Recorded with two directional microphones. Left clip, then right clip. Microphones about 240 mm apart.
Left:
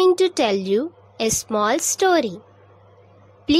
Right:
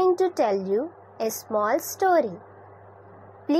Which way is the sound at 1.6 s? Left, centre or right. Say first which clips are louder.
Left 4 dB; left.